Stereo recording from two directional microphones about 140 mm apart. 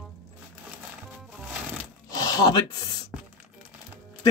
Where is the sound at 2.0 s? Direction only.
25° left (ahead or behind).